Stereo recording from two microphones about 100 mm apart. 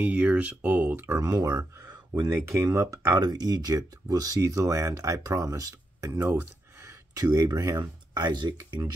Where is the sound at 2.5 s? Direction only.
30° right (ahead or behind).